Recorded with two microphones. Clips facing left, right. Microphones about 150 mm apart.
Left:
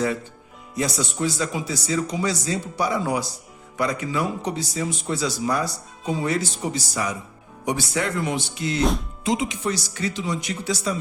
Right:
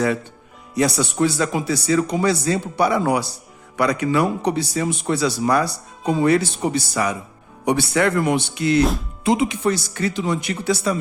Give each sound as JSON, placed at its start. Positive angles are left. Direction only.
{"t": 0.8, "sound": "a man's voice", "side_deg": -65}
{"t": 8.8, "sound": "speech", "side_deg": 0}
{"t": 9.2, "sound": "a man's voice", "side_deg": -60}